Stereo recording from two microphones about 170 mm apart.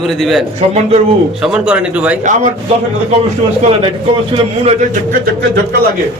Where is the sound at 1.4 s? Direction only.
5° right (ahead or behind).